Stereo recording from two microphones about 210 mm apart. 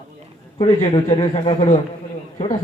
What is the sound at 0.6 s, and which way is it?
A man's voice, 30° left (ahead or behind).